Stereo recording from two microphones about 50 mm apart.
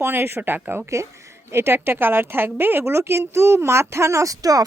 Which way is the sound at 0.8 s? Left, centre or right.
Right.